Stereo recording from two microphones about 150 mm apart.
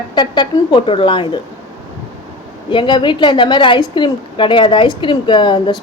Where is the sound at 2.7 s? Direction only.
30° left (ahead or behind).